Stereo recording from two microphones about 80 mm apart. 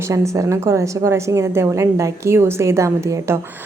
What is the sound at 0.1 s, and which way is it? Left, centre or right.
A woman's voice, right.